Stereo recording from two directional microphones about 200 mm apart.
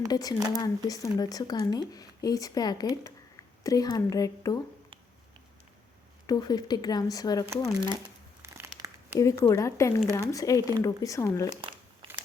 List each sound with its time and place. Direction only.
0.1 s speech: 20° left (ahead or behind)
6.2 s speech: 20° left (ahead or behind)
8.4 s crumpling: 10° right (ahead or behind)
9.1 s speech: 15° left (ahead or behind)
12.0 s biting: 25° right (ahead or behind)